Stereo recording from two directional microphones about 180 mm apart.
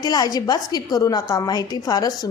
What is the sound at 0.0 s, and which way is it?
A woman's voice, 20° left (ahead or behind).